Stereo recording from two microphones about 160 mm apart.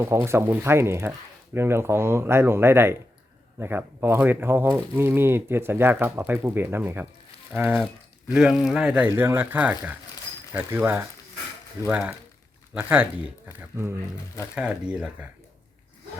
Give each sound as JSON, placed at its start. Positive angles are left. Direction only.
{"t": 0.2, "sound": "speech", "side_deg": -15}